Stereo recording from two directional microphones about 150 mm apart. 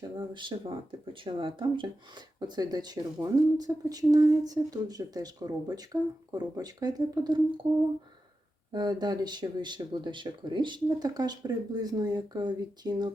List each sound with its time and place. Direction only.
0.0 s speech: 30° right (ahead or behind)
8.7 s speech: 25° right (ahead or behind)